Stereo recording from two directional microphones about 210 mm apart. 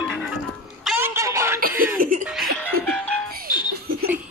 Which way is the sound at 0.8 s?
10° right (ahead or behind).